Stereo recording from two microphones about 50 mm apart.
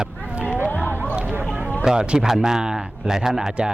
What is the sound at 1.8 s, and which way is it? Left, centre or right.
A man's voice, centre.